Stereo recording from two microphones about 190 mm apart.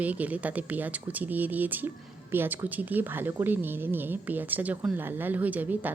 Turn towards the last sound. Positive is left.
turn(degrees=-10)  # may be behind; listen again after turning